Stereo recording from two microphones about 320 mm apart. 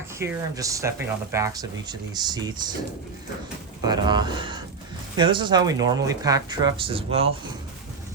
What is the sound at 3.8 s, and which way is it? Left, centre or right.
Speech, centre.